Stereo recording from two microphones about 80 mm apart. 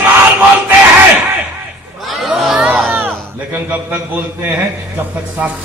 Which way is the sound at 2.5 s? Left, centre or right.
Centre.